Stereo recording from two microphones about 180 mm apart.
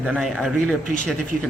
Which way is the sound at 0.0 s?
Centre (ahead or behind).